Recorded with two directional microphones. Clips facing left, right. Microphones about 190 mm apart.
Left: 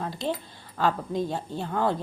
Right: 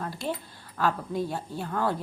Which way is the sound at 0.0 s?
20° left (ahead or behind).